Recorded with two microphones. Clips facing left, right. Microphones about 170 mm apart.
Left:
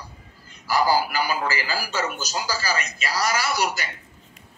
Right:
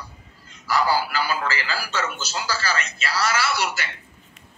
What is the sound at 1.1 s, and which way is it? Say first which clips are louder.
A man's voice: even; 15° left (ahead or behind).